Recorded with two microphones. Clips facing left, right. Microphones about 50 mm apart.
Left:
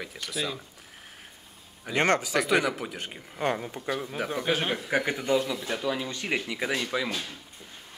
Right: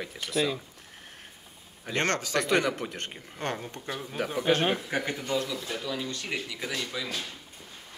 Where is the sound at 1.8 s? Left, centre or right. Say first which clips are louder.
Left 4 dB; centre.